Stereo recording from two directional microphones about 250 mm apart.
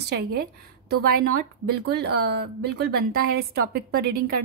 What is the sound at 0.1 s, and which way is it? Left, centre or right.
A woman's voice, right.